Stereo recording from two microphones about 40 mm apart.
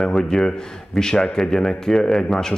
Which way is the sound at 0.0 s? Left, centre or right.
Centre.